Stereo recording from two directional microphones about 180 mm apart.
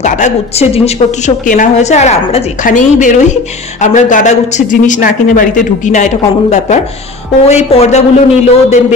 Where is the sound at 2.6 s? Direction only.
45° left (ahead or behind).